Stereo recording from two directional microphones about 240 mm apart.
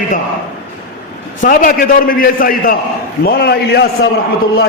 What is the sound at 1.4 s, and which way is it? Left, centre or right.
A man's voice, left.